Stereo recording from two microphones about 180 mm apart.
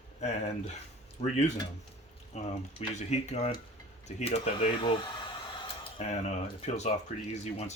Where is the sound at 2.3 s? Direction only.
35° left (ahead or behind).